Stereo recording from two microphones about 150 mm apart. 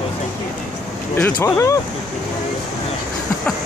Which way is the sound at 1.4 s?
20° left (ahead or behind).